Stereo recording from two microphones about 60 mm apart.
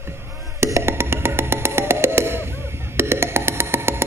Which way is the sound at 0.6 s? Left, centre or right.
Right.